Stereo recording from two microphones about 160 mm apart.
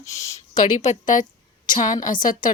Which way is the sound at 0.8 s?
55° left (ahead or behind).